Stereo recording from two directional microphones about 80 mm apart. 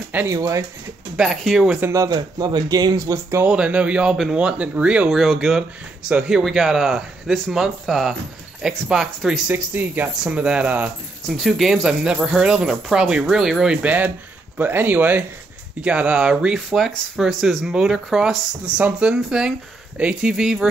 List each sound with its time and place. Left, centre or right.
0.3 s speech: right
1.1 s speech: centre
1.8 s speech: right
2.0 s speech: right
3.4 s speech: centre
5.1 s speech: centre
9.5 s speech: right
10.2 s speech: centre
11.2 s speech: centre
13.8 s speech: centre